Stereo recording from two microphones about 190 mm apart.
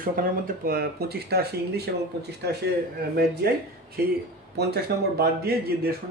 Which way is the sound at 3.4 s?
55° right (ahead or behind).